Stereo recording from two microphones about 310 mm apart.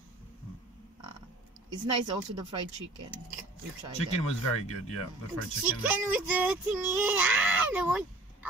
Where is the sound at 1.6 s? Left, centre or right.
Centre.